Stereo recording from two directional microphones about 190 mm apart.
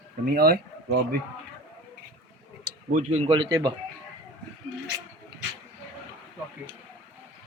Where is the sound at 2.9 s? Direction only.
40° right (ahead or behind); by 3.7 s 25° right (ahead or behind).